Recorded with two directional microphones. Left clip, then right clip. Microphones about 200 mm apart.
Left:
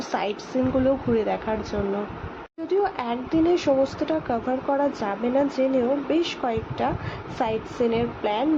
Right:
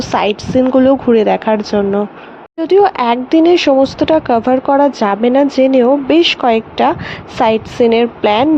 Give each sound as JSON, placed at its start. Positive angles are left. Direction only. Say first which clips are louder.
{"t": 0.0, "sound": "speech", "louder": "right 13 dB", "side_deg": -45}